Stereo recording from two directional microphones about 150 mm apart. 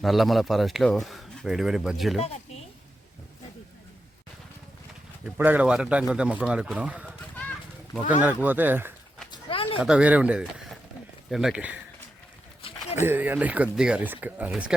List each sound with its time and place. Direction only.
0.0 s speech: centre (ahead or behind)
5.2 s speech: 10° right (ahead or behind)
8.2 s speech: 10° right (ahead or behind)
9.3 s a sound: 35° left (ahead or behind)
9.8 s speech: 5° right (ahead or behind)
12.6 s a sound: 40° left (ahead or behind)
13.0 s speech: 15° right (ahead or behind)